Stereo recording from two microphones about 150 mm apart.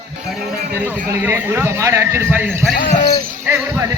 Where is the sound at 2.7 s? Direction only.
65° left (ahead or behind).